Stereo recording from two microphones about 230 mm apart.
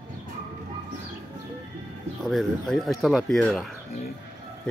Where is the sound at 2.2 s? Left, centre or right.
Centre.